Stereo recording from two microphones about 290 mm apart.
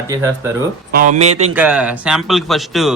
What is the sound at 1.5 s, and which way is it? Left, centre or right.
Speech, centre.